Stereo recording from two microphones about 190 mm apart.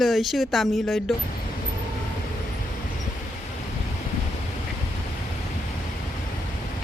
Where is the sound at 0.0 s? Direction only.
Centre (ahead or behind).